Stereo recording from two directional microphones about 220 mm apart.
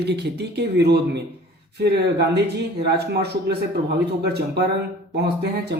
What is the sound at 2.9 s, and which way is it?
Speech, 45° right (ahead or behind).